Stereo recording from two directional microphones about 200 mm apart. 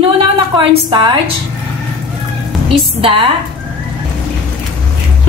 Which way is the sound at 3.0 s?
25° right (ahead or behind).